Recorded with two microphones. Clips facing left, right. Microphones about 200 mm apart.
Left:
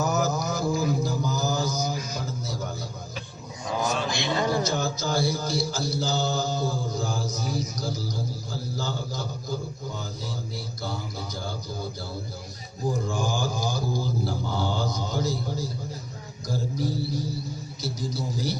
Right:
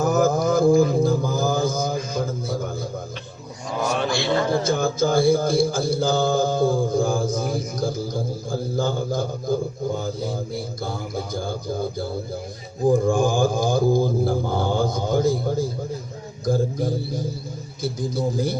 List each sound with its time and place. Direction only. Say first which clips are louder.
0.0 s mantra: right 7 dB; 50° right (ahead or behind)
4.1 s a sound: right 6 dB; 20° left (ahead or behind)
4.6 s mantra: right 7 dB; 50° right (ahead or behind)
16.5 s a man's voice: right 7 dB; 50° right (ahead or behind)
17.8 s mantra: right 7 dB; 55° right (ahead or behind)